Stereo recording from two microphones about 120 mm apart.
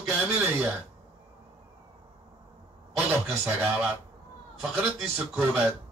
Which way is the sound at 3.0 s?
15° right (ahead or behind).